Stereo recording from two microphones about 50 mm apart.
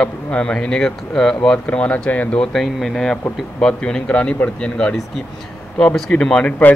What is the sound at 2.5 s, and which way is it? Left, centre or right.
A man's voice, centre.